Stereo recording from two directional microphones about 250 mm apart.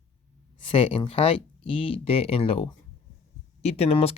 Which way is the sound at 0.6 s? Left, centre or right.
Left.